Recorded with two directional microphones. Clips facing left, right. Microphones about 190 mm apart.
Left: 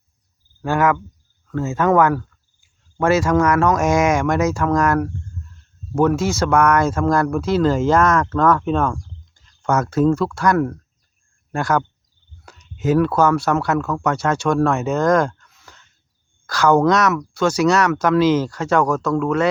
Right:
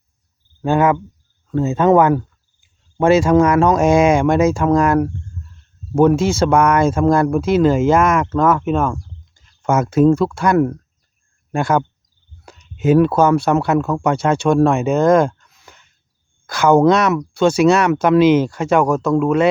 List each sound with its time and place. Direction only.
0.6 s speech: 25° right (ahead or behind); by 9.0 s 5° right (ahead or behind)
9.6 s a sound: 10° right (ahead or behind)
9.8 s speech: 15° right (ahead or behind)